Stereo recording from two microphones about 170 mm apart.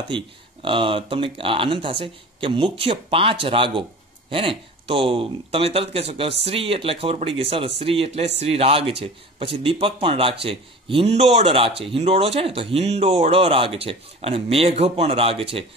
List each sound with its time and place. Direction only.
0.1 s speech: 30° right (ahead or behind)